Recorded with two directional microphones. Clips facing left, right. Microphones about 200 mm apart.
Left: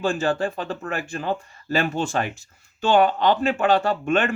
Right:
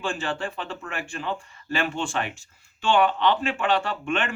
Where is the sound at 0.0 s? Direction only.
40° left (ahead or behind).